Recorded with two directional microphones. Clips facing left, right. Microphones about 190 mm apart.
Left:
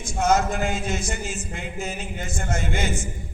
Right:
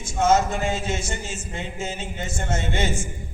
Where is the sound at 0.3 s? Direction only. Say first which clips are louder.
Right 1 dB; 25° right (ahead or behind).